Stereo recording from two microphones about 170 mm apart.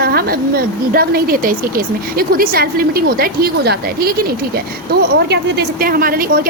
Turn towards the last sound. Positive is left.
turn(degrees=-60)  # may be behind; listen again after turning